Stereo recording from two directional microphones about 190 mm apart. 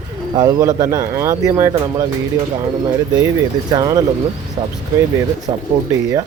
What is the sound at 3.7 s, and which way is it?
Speech, 20° right (ahead or behind).